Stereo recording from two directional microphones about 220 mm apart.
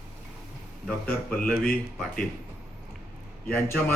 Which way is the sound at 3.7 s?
5° left (ahead or behind).